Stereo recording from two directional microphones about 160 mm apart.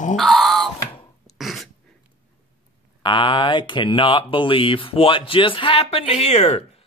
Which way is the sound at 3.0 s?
30° left (ahead or behind).